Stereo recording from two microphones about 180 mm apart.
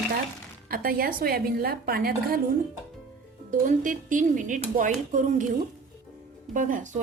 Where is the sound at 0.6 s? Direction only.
55° right (ahead or behind).